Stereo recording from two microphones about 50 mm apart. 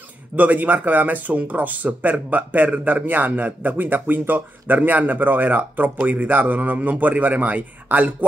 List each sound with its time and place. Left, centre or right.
0.4 s speech: right